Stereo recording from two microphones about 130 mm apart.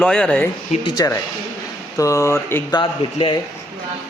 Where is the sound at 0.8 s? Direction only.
30° left (ahead or behind).